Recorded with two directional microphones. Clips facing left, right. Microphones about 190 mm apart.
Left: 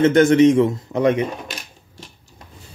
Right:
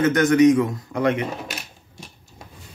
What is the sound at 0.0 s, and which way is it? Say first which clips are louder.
Speech: left 3 dB; 25° left (ahead or behind).